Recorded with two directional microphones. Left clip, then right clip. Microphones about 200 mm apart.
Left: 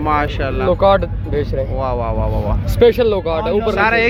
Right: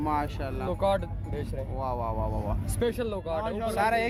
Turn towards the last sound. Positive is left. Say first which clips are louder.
# left 11 dB
turn(degrees=-10)  # may be behind; listen again after turning